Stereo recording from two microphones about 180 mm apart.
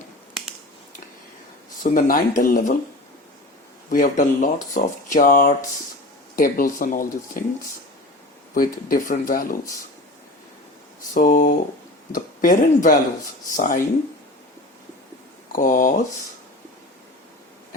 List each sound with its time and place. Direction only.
1.8 s speech: 45° left (ahead or behind)
3.8 s speech: 45° left (ahead or behind)
8.5 s speech: 50° left (ahead or behind)
11.1 s speech: 45° left (ahead or behind)
15.5 s speech: 50° left (ahead or behind)